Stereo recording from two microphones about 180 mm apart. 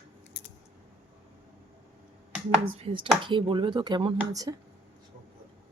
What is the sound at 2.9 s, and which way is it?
Speech, 25° right (ahead or behind).